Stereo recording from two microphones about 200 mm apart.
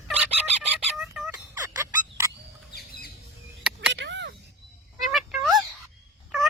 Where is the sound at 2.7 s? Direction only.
50° left (ahead or behind).